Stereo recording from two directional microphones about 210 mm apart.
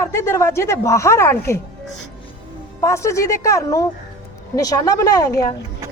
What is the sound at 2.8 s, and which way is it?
A woman's voice, 15° left (ahead or behind).